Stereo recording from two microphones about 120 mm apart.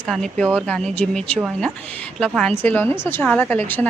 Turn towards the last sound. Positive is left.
turn(degrees=15)  # may be behind; listen again after turning